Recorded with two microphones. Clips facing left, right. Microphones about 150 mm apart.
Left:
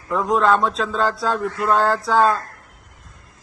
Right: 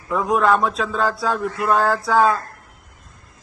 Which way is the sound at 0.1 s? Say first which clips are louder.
Even; 5° right (ahead or behind).